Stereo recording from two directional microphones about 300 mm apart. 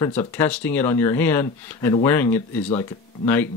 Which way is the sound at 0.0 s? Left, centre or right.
Centre.